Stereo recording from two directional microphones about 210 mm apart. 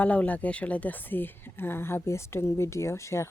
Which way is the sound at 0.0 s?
5° left (ahead or behind).